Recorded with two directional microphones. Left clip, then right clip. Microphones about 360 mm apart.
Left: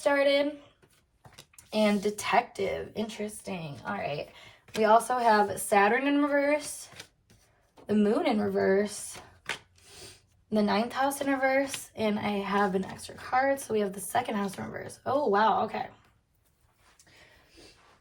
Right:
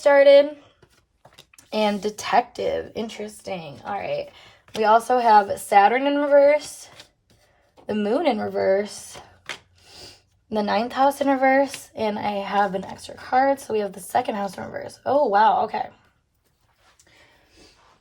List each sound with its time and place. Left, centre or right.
0.0 s speech: right
1.5 s speech: right
7.9 s speech: right
10.0 s speech: right